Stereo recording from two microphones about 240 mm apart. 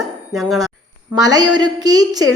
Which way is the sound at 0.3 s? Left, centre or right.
Centre.